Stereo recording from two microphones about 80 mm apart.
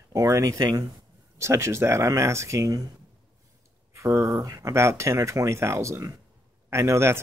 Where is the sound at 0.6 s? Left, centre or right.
Right.